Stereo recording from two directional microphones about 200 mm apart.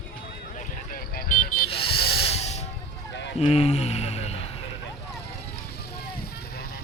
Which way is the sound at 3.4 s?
30° left (ahead or behind).